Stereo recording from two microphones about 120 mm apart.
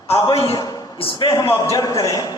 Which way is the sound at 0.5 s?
30° left (ahead or behind).